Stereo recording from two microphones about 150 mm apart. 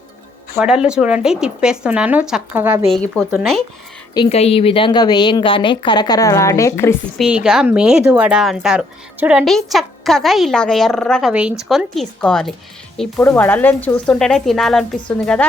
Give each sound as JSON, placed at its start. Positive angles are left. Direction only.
{"t": 0.6, "sound": "speech", "side_deg": -5}
{"t": 2.9, "sound": "speech", "side_deg": 0}
{"t": 4.3, "sound": "a woman's voice", "side_deg": 45}
{"t": 7.2, "sound": "speech", "side_deg": -5}